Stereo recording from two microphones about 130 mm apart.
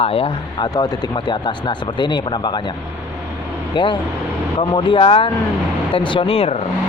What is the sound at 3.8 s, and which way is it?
Speech, 35° left (ahead or behind).